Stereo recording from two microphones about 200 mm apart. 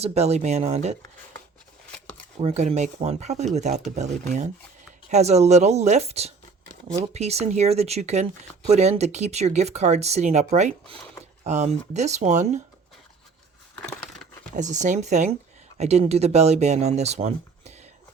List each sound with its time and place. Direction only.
0.0 s speech: 30° right (ahead or behind)
2.4 s speech: 30° right (ahead or behind)
13.7 s crushing: 5° left (ahead or behind)
14.5 s speech: 35° right (ahead or behind)